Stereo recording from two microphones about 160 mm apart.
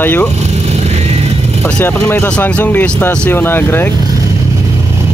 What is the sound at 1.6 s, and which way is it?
Speech, 10° left (ahead or behind).